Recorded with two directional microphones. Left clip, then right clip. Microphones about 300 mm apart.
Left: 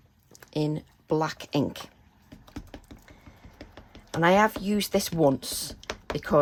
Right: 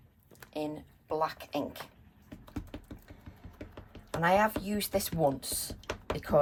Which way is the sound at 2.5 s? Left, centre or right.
Centre.